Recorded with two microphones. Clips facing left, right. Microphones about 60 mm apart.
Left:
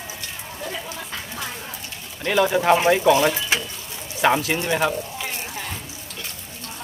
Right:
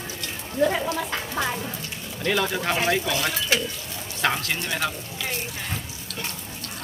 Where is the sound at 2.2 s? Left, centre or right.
Centre.